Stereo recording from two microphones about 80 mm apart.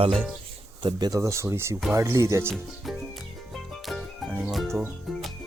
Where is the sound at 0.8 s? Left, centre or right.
Right.